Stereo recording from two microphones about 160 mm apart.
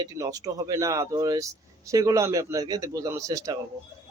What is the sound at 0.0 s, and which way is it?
Speech, 20° right (ahead or behind).